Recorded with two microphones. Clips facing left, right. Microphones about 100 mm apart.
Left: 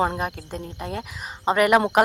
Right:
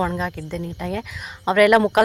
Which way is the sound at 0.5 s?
35° left (ahead or behind).